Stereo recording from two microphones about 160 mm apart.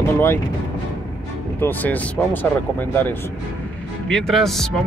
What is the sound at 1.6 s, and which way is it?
Speech, 10° left (ahead or behind).